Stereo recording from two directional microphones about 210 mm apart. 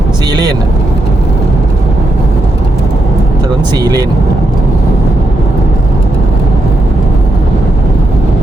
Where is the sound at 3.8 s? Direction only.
15° right (ahead or behind).